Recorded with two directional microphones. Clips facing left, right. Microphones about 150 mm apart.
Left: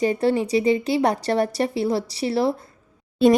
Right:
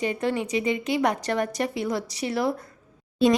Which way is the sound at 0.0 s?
35° left (ahead or behind).